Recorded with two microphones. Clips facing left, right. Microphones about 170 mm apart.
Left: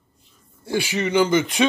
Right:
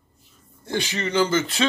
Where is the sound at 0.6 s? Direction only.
10° left (ahead or behind).